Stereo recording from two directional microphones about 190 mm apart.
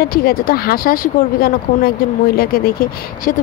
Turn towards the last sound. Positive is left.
turn(degrees=45)  # may be behind; listen again after turning